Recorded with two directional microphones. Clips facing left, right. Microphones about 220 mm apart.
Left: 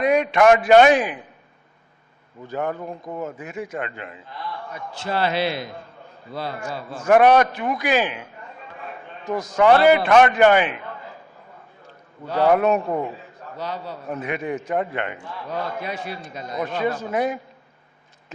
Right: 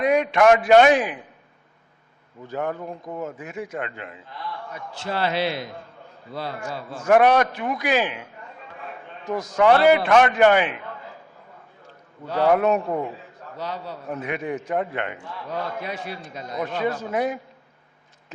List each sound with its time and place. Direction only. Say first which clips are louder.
0.0 s a man's voice: left 1 dB; 15° left (ahead or behind)
2.6 s a man's voice: left 1 dB; 20° left (ahead or behind)
3.4 s a man's voice: left 1 dB; 15° left (ahead or behind)
12.3 s a man's voice: left 1 dB; 15° left (ahead or behind)